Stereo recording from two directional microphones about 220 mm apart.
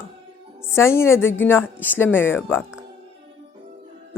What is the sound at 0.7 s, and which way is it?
Speech, 10° left (ahead or behind).